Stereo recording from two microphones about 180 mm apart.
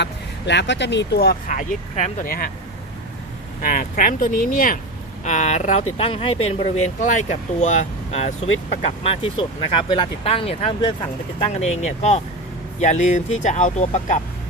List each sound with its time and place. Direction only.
0.0 s speech: 75° left (ahead or behind); by 2.5 s 50° left (ahead or behind)
3.6 s speech: 50° left (ahead or behind)
5.2 s speech: 40° left (ahead or behind)
9.0 s speech: 30° left (ahead or behind)